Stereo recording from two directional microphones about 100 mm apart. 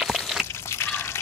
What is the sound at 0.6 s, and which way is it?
Drip, 25° left (ahead or behind).